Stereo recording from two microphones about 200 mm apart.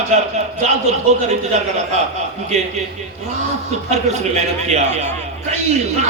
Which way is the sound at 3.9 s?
35° right (ahead or behind).